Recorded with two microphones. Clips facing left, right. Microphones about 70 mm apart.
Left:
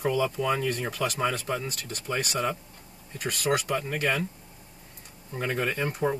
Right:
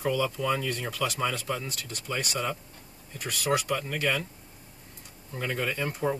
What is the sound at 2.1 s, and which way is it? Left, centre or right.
Speech, centre.